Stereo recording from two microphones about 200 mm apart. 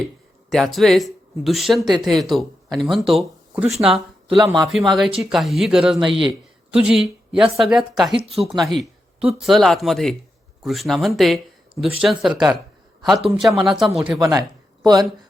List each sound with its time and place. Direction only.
0.5 s speech: centre (ahead or behind)
8.1 s speech: 30° right (ahead or behind)
8.5 s speech: centre (ahead or behind)
13.5 s speech: 5° right (ahead or behind)
14.0 s speech: 20° right (ahead or behind)